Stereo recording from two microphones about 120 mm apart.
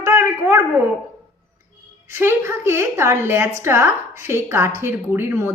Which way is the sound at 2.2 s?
20° right (ahead or behind).